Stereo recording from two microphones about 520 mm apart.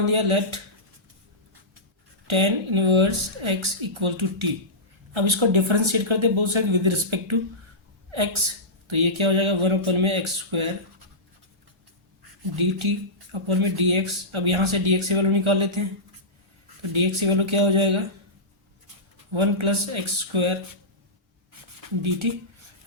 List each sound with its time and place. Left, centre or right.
0.1 s speech: right
2.2 s speech: right
12.5 s speech: right
16.8 s speech: right
19.3 s speech: right
21.5 s a sound: right
22.2 s speech: right